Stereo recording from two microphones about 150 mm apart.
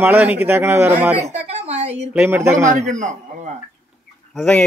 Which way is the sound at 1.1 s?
45° right (ahead or behind).